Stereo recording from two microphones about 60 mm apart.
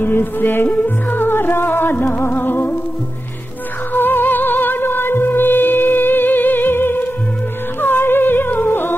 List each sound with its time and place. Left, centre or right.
0.0 s music: left
3.9 s music: left
7.8 s humming: left